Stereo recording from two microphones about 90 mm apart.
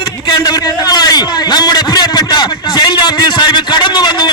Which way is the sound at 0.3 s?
50° left (ahead or behind).